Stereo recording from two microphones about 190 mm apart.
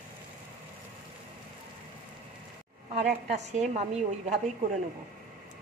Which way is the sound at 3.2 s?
35° right (ahead or behind).